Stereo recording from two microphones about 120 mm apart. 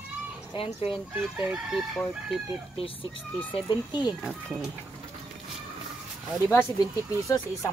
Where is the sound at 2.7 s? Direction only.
45° left (ahead or behind).